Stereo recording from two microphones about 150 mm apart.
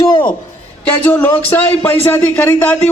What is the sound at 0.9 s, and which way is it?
A man's voice, 10° left (ahead or behind).